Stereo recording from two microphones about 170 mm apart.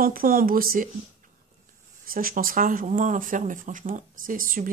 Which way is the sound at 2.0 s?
55° right (ahead or behind).